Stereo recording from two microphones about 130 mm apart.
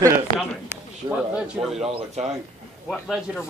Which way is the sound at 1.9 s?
50° right (ahead or behind).